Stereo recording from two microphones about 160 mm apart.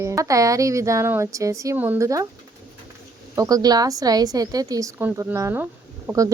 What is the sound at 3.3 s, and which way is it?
A woman's voice, 25° right (ahead or behind).